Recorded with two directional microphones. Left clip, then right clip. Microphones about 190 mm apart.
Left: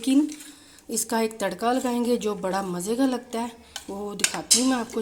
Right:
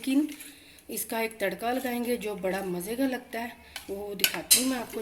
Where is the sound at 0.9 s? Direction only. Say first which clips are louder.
Left 6 dB; 45° left (ahead or behind).